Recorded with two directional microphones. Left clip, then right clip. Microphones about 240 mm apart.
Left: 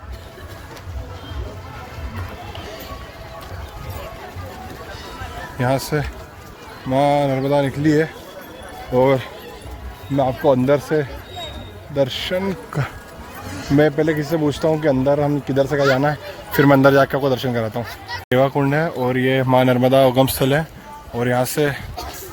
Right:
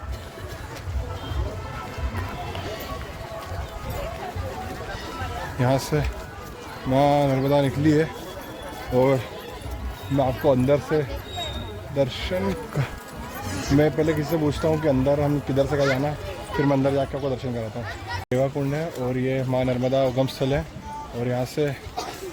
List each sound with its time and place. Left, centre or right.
5.5 s speech: left
9.0 s speech: left
12.7 s speech: left
13.7 s speech: left